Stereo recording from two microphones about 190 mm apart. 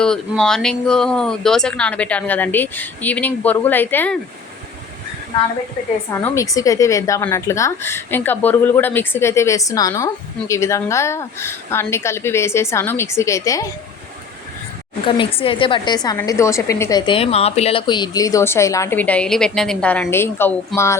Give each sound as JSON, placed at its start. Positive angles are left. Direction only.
{"t": 0.0, "sound": "speech", "side_deg": 5}
{"t": 6.1, "sound": "speech", "side_deg": 15}
{"t": 15.0, "sound": "a woman's voice", "side_deg": 30}
{"t": 17.1, "sound": "speech", "side_deg": 30}
{"t": 20.7, "sound": "speech", "side_deg": 0}